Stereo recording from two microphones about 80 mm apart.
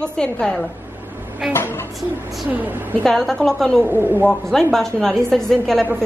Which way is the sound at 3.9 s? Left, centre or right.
Right.